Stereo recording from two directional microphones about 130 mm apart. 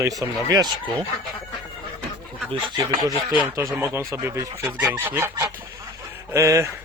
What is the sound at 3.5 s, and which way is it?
Speech, 25° right (ahead or behind).